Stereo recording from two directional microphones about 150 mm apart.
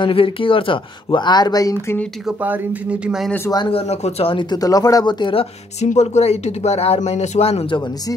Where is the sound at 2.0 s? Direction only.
Centre (ahead or behind).